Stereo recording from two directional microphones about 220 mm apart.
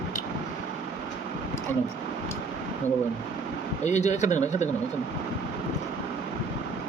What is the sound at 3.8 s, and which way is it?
Speech, 30° left (ahead or behind).